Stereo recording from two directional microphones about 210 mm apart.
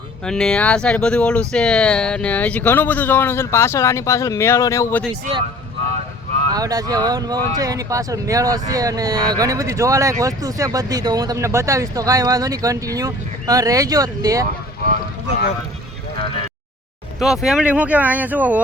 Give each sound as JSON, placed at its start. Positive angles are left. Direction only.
{"t": 0.3, "sound": "speech", "side_deg": 5}
{"t": 6.5, "sound": "speech", "side_deg": -15}
{"t": 17.2, "sound": "speech", "side_deg": 0}